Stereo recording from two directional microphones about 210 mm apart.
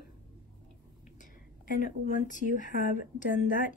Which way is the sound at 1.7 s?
40° left (ahead or behind).